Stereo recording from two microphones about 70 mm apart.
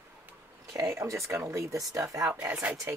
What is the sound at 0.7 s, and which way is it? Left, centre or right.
Speech, right.